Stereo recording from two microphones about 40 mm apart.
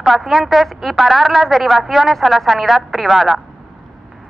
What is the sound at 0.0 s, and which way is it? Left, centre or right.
Speech, centre.